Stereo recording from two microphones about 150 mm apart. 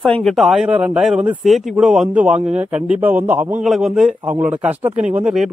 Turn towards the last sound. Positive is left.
turn(degrees=-5)  # may be behind; listen again after turning